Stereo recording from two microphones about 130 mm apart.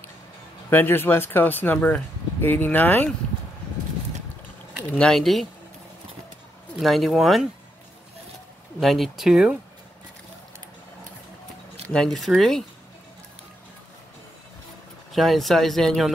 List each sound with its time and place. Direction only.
0.7 s speech: 15° left (ahead or behind)
4.9 s speech: 5° left (ahead or behind)
6.8 s speech: centre (ahead or behind)
8.7 s speech: centre (ahead or behind)
11.9 s speech: 5° left (ahead or behind)
15.1 s speech: centre (ahead or behind)